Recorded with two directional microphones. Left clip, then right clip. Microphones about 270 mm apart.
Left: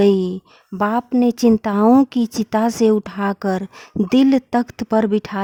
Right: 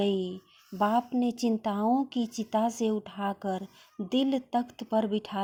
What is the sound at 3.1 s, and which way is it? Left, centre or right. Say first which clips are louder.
Speech: left 11 dB; left.